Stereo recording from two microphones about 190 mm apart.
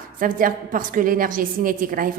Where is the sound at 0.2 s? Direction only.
45° right (ahead or behind).